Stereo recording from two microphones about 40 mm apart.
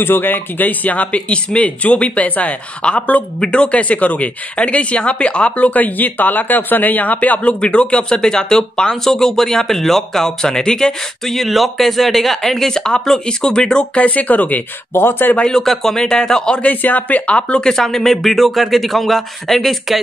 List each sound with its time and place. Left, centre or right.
0.0 s speech: left
1.3 s speech: left
5.7 s speech: left
7.6 s speech: left
13.9 s speech: left
15.0 s speech: left
15.4 s speech: centre
16.6 s speech: left
17.4 s speech: left
17.6 s speech: centre